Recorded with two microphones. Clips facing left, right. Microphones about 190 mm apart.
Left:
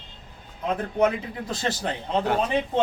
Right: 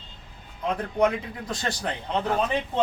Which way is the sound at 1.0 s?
5° left (ahead or behind).